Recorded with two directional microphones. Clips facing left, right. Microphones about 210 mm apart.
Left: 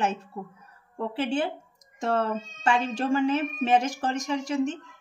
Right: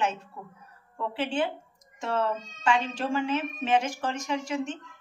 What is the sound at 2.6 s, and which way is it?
Speech, 40° left (ahead or behind).